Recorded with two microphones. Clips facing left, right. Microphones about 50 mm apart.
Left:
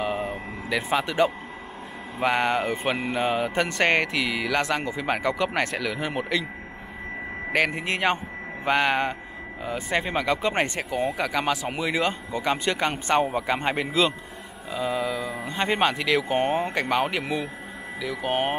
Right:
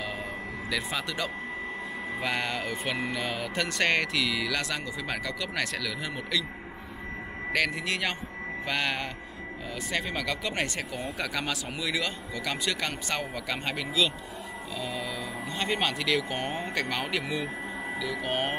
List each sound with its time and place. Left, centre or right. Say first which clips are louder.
0.0 s vehicle: left 7 dB; left
2.1 s speech: left 9 dB; left
7.5 s speech: left 4 dB; left
10.8 s speech: left 7 dB; centre
11.7 s speech: left 6 dB; left
14.9 s speech: left 9 dB; centre
15.5 s speech: left 6 dB; left